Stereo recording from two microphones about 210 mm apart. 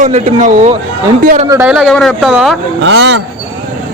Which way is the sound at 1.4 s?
10° right (ahead or behind).